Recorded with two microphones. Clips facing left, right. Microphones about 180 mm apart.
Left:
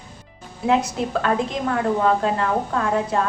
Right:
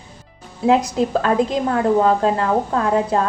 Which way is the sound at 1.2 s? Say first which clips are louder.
Right 4 dB; 35° right (ahead or behind).